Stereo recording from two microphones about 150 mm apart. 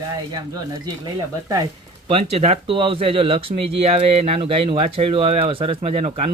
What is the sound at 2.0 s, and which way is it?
Speech, 40° right (ahead or behind).